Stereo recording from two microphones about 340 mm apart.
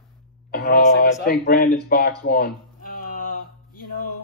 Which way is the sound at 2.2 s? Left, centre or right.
Left.